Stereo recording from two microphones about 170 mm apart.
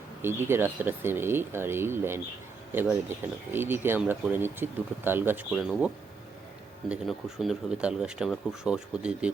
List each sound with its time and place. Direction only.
0.2 s speech: 15° right (ahead or behind)
5.5 s speech: centre (ahead or behind)